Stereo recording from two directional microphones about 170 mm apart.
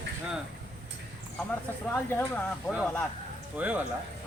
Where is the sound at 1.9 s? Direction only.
10° left (ahead or behind).